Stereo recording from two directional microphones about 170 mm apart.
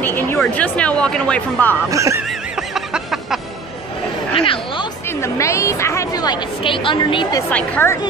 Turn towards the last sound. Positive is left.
turn(degrees=10)  # may be behind; listen again after turning